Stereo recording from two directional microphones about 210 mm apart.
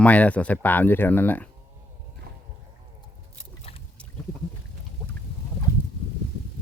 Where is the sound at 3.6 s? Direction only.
25° left (ahead or behind).